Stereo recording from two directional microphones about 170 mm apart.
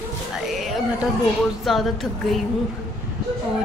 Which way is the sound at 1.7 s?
Centre (ahead or behind).